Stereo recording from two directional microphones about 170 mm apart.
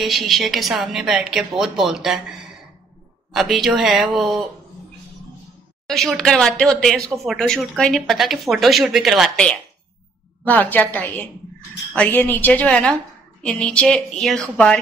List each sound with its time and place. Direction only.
0.0 s speech: centre (ahead or behind)
3.3 s speech: centre (ahead or behind)
5.9 s a woman's voice: centre (ahead or behind)